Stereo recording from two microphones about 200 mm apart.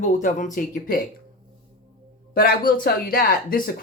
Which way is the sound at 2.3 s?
50° left (ahead or behind).